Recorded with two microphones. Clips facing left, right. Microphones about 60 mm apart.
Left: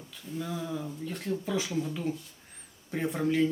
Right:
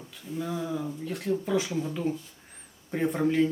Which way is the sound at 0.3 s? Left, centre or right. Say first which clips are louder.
Right 3 dB; centre.